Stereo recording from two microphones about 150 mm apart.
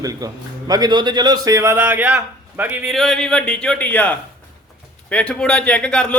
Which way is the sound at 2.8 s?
Centre (ahead or behind).